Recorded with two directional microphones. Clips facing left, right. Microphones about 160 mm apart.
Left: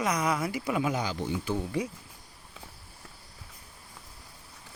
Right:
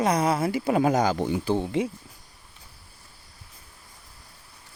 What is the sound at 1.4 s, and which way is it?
Speech, 30° right (ahead or behind).